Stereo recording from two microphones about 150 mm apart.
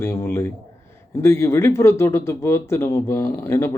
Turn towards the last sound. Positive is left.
turn(degrees=15)  # may be behind; listen again after turning